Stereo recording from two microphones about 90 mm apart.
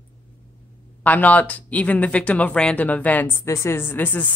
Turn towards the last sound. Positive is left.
turn(degrees=20)  # may be behind; listen again after turning